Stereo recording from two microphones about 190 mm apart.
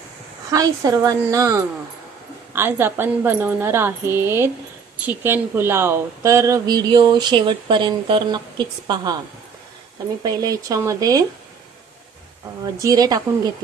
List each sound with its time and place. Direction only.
0.5 s a woman's voice: 20° right (ahead or behind)
10.2 s speech: 20° right (ahead or behind)
12.8 s speech: 20° right (ahead or behind)